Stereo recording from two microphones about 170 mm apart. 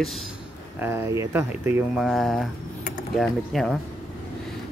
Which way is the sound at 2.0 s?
Centre (ahead or behind).